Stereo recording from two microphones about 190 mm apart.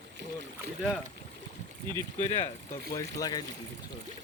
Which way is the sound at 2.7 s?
20° left (ahead or behind).